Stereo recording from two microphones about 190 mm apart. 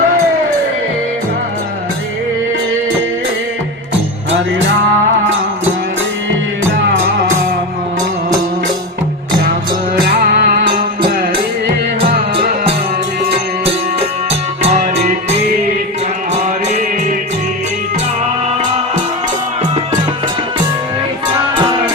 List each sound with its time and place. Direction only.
10.0 s music: 50° right (ahead or behind)
12.1 s music: 50° right (ahead or behind)
13.7 s music: 30° right (ahead or behind)